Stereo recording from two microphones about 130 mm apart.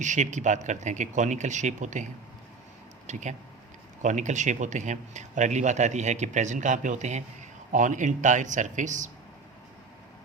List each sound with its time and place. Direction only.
0.0 s speech: 70° right (ahead or behind)
3.1 s speech: 65° right (ahead or behind)
7.7 s speech: 75° right (ahead or behind)